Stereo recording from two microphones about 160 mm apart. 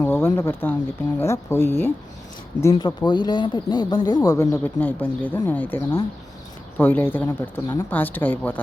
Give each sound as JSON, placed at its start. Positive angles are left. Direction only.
{"t": 0.0, "sound": "speech", "side_deg": 15}